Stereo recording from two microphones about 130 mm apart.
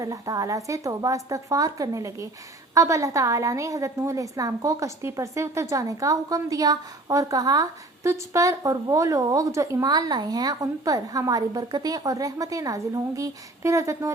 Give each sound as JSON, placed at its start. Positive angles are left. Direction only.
{"t": 0.0, "sound": "a woman's voice", "side_deg": -25}